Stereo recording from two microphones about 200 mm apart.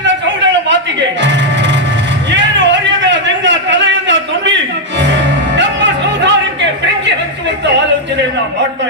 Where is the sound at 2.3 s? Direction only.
60° right (ahead or behind).